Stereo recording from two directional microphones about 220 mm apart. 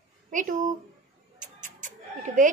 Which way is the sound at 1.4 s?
35° right (ahead or behind).